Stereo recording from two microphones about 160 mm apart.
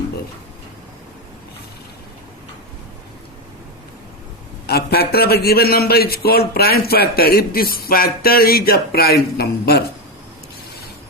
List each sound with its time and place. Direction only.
4.6 s a man's voice: 80° left